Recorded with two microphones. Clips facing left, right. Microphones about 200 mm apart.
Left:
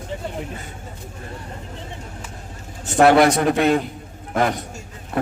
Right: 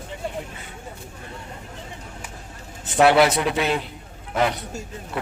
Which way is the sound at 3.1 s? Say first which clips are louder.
Left 4 dB; 45° left (ahead or behind).